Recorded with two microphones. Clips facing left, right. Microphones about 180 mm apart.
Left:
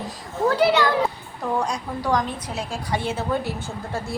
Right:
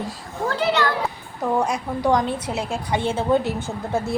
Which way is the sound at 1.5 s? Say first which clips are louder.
Right 3 dB; 25° right (ahead or behind).